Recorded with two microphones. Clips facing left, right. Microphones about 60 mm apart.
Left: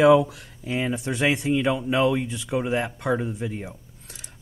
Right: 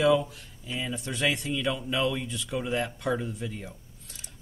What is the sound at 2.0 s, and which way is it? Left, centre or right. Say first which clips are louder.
Speech: left 7 dB; left.